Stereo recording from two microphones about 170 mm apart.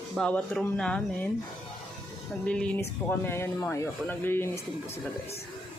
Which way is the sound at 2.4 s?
5° left (ahead or behind).